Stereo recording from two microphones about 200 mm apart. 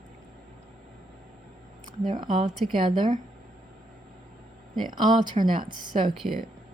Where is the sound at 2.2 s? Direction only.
25° right (ahead or behind).